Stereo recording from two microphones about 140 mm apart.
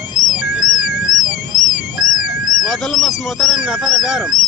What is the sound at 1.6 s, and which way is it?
Car alarm, 70° left (ahead or behind).